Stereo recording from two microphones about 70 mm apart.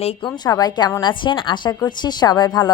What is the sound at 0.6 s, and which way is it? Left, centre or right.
Speech, left.